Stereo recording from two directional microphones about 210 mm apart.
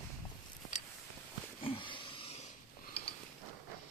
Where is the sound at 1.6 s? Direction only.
25° left (ahead or behind).